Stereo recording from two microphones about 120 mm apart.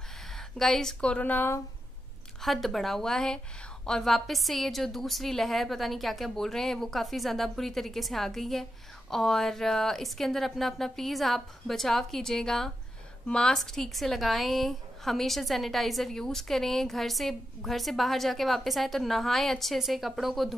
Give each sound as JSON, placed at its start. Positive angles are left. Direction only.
{"t": 0.3, "sound": "speech", "side_deg": 5}
{"t": 2.4, "sound": "a woman's voice", "side_deg": 0}